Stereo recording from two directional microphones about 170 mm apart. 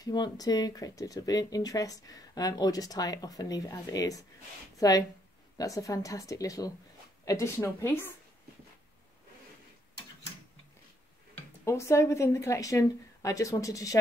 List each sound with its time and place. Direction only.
0.0 s speech: 25° left (ahead or behind)
11.3 s speech: 15° left (ahead or behind)